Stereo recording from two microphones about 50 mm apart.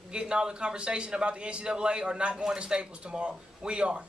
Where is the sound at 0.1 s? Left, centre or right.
Centre.